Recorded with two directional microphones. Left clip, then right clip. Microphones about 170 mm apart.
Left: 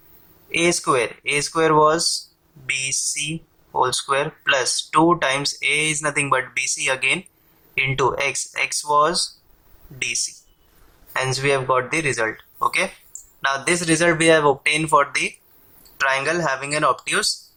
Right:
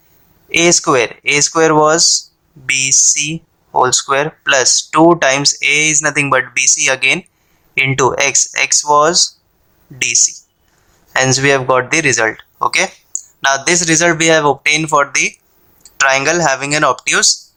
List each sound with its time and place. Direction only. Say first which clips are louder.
0.5 s speech: right 8 dB; 45° right (ahead or behind)